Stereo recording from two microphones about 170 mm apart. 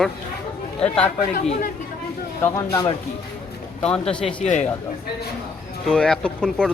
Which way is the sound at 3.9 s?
5° left (ahead or behind).